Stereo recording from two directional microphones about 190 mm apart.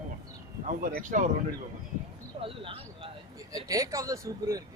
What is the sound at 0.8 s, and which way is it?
Speech, 45° right (ahead or behind).